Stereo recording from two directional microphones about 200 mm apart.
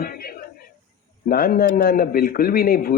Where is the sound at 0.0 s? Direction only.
45° left (ahead or behind).